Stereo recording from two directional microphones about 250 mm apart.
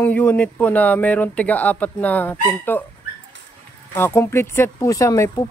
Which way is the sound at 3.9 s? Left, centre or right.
Centre.